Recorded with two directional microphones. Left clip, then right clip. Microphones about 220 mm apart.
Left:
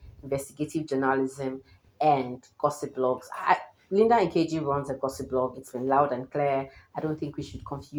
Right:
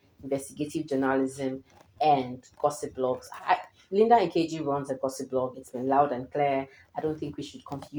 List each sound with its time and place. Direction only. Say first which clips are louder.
0.3 s speech: even; 35° left (ahead or behind)